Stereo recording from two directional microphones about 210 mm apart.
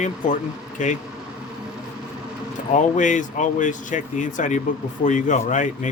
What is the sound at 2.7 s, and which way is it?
Speech, 35° left (ahead or behind).